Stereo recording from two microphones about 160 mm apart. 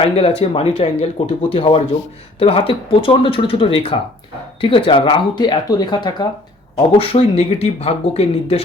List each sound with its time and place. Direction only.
0.0 s speech: 35° left (ahead or behind)